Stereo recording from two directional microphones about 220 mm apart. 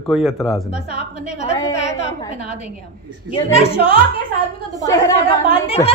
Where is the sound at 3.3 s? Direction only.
25° left (ahead or behind).